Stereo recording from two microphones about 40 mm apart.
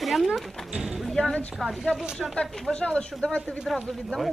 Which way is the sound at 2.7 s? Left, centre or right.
Left.